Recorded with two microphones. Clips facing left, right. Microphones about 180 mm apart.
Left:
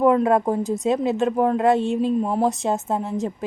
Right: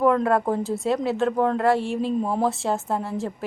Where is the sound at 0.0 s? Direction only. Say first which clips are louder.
Left 3 dB; 15° left (ahead or behind).